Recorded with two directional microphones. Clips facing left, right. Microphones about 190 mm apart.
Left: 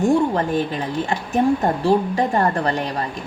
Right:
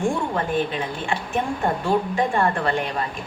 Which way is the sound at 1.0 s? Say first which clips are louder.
Left 8 dB; 40° left (ahead or behind).